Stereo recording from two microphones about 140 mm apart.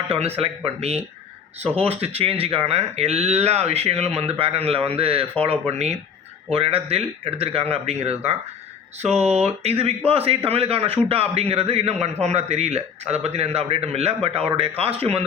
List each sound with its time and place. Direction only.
0.1 s speech: 45° right (ahead or behind)